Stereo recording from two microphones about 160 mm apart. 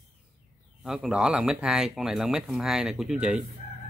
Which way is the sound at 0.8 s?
Centre (ahead or behind).